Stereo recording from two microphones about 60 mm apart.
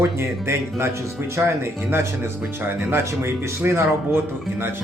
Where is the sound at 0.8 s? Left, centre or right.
Right.